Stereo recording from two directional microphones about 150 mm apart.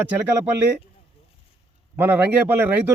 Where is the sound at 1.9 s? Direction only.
10° right (ahead or behind).